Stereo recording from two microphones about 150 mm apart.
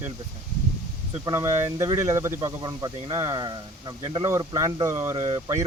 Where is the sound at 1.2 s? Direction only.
20° right (ahead or behind).